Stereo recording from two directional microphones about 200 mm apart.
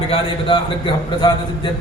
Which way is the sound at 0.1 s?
25° left (ahead or behind).